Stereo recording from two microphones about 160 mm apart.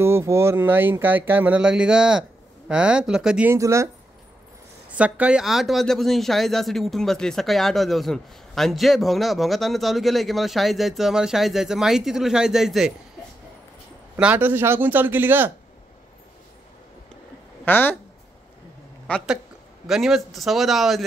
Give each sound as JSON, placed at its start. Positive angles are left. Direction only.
{"t": 0.0, "sound": "speech", "side_deg": -15}
{"t": 3.5, "sound": "speech", "side_deg": -20}
{"t": 4.9, "sound": "speech", "side_deg": -10}
{"t": 14.1, "sound": "speech", "side_deg": -10}
{"t": 17.6, "sound": "speech", "side_deg": 10}
{"t": 19.1, "sound": "speech", "side_deg": 10}
{"t": 19.9, "sound": "speech", "side_deg": 0}